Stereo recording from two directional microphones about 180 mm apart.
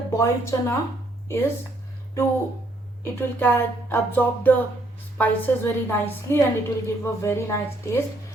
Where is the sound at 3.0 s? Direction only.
10° left (ahead or behind).